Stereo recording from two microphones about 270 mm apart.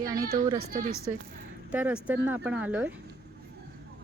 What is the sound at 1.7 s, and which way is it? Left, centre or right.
Speech, centre.